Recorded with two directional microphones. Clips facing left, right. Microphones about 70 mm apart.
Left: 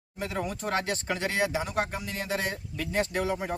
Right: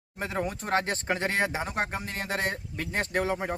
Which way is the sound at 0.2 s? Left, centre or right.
Right.